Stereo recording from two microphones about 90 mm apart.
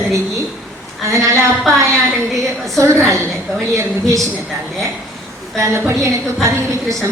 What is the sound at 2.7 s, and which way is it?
Speech, 30° right (ahead or behind).